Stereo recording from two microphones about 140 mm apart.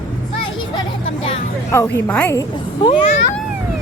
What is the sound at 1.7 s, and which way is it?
Speech, 20° left (ahead or behind).